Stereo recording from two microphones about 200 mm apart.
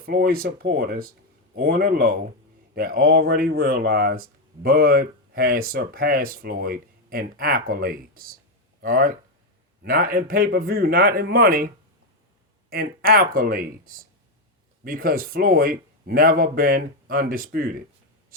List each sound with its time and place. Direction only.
0.0 s speech: 50° right (ahead or behind)
12.7 s speech: 50° right (ahead or behind)